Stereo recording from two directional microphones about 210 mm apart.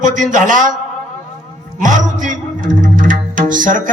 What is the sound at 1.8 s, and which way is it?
A man's voice, 35° right (ahead or behind).